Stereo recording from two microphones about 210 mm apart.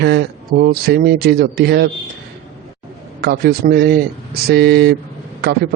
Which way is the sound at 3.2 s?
50° right (ahead or behind).